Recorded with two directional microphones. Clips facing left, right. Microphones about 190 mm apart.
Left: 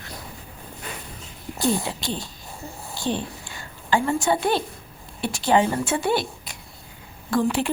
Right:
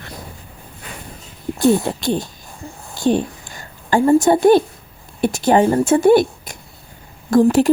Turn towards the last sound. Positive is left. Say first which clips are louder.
# right 9 dB
turn(degrees=-45)  # may be behind; listen again after turning